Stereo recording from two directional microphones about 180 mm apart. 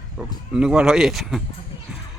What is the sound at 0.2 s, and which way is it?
Speech, 5° right (ahead or behind).